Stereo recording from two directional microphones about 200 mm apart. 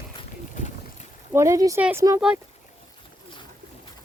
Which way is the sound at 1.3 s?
15° right (ahead or behind).